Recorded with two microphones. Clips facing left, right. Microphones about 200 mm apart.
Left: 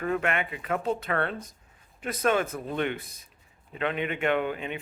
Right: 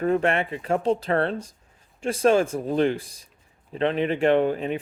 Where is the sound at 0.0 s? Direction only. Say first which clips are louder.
Right 6 dB; 30° right (ahead or behind).